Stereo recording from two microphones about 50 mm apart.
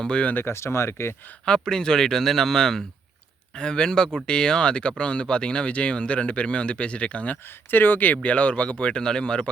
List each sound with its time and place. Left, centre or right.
0.0 s speech: centre
0.4 s speech: left
1.5 s speech: centre
7.7 s speech: left; by 9.5 s centre